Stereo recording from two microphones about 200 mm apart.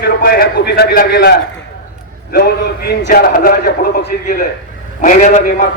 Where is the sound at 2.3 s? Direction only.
55° left (ahead or behind).